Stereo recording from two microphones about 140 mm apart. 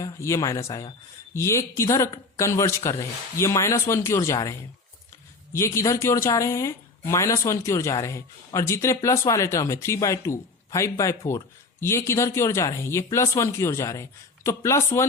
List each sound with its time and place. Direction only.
0.0 s speech: 20° left (ahead or behind)
5.5 s speech: 20° left (ahead or behind)